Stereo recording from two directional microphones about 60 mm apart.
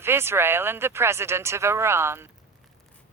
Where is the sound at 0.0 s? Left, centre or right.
Right.